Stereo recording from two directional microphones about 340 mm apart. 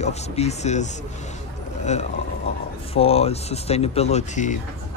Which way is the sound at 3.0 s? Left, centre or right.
Centre.